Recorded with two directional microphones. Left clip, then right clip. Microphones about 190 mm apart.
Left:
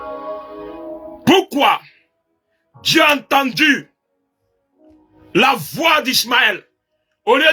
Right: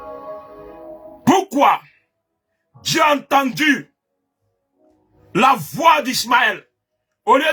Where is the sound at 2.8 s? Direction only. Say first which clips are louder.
Left 3 dB; 10° right (ahead or behind).